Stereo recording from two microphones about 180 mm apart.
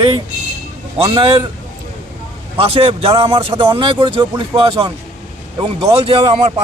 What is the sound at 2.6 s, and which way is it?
Speech, 30° right (ahead or behind).